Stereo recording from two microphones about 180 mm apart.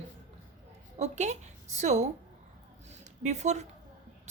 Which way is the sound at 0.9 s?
40° right (ahead or behind).